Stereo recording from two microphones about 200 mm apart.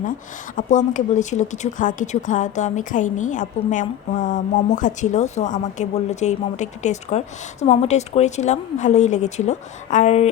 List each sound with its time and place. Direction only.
0.5 s speech: 40° left (ahead or behind)